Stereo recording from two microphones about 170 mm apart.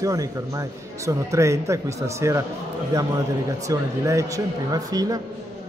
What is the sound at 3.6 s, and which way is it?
Speech, 20° right (ahead or behind).